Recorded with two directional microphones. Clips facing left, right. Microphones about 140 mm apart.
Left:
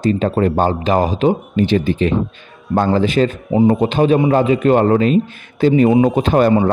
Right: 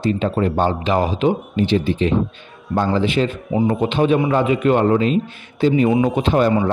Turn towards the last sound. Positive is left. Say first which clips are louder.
# left 4 dB
turn(degrees=45)  # may be behind; listen again after turning